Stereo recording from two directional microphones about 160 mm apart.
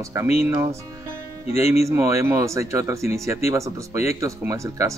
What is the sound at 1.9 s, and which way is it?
Speech, 20° right (ahead or behind).